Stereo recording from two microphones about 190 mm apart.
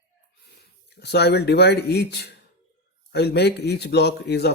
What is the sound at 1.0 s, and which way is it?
Speech, 60° left (ahead or behind).